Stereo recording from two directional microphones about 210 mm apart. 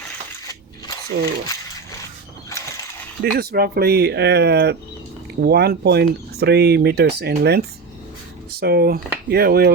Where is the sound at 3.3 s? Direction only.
45° right (ahead or behind).